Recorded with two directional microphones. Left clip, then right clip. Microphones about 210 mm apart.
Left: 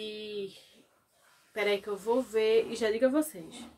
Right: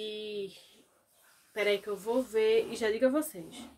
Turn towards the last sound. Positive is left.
turn(degrees=0)  # may be behind; listen again after turning